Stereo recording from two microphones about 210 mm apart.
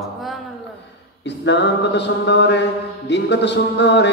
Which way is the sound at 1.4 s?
55° left (ahead or behind).